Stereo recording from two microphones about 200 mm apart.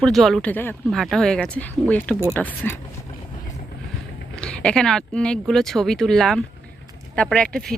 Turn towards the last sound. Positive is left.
turn(degrees=5)  # may be behind; listen again after turning